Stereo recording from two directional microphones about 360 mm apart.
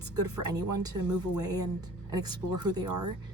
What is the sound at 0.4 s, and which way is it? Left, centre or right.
Speech, centre.